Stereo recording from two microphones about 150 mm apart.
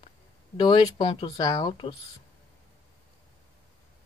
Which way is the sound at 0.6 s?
30° left (ahead or behind).